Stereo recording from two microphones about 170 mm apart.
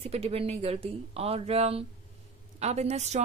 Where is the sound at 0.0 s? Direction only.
35° right (ahead or behind).